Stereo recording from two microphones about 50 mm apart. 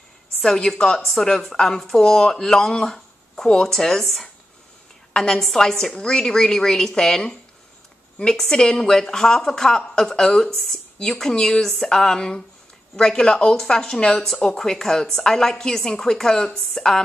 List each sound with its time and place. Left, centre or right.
0.4 s a woman's voice: centre